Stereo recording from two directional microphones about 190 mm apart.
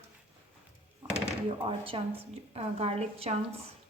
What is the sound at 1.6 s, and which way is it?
A woman's voice, 30° right (ahead or behind).